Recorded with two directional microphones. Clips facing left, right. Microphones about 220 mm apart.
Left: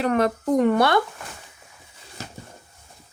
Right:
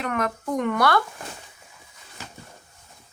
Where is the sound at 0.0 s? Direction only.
30° left (ahead or behind).